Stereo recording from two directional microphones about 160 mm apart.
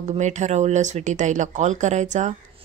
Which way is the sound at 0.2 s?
45° right (ahead or behind).